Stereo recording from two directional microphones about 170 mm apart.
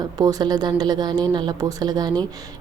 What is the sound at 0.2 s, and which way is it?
Speech, 20° right (ahead or behind).